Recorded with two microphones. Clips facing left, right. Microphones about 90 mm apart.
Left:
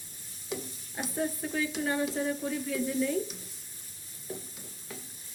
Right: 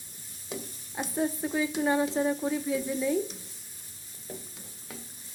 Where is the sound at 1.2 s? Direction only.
15° right (ahead or behind).